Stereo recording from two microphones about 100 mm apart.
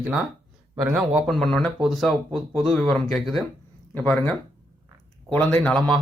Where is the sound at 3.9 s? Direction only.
15° left (ahead or behind).